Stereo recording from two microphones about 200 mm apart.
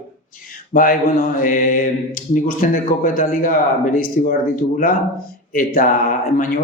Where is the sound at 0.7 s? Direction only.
45° left (ahead or behind).